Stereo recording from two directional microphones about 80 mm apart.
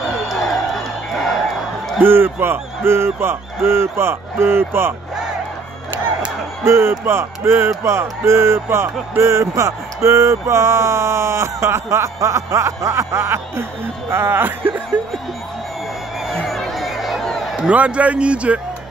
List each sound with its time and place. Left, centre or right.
2.0 s speech: right
6.6 s speech: right
16.3 s a sound: centre
17.6 s a man's voice: centre